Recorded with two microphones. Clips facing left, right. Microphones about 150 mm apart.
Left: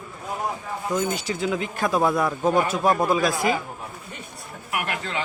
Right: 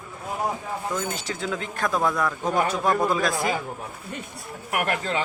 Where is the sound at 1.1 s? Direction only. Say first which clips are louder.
Left 4 dB; 10° left (ahead or behind).